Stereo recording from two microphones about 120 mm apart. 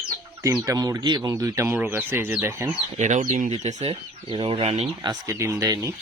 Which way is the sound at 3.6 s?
60° right (ahead or behind).